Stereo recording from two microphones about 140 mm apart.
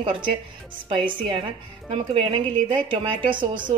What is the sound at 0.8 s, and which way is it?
A woman's voice, 35° right (ahead or behind).